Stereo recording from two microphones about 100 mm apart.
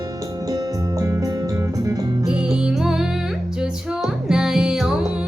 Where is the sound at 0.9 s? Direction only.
35° right (ahead or behind).